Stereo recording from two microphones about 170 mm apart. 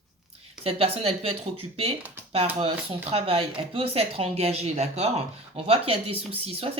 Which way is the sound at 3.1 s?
35° right (ahead or behind).